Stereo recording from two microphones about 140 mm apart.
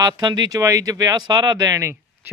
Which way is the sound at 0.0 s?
30° right (ahead or behind).